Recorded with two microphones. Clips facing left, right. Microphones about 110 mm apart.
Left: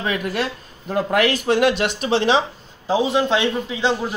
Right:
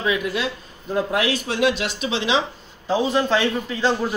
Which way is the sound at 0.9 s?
65° left (ahead or behind).